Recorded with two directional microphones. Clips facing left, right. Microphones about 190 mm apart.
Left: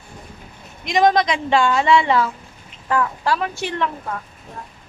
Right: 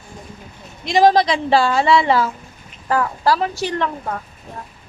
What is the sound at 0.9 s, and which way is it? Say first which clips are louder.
A woman's voice: right 3 dB; 30° right (ahead or behind).